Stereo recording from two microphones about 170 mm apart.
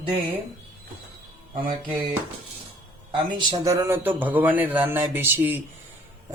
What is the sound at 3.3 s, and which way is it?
Speech, 25° right (ahead or behind).